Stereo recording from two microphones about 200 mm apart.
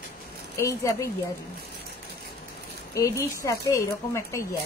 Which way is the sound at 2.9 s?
15° left (ahead or behind).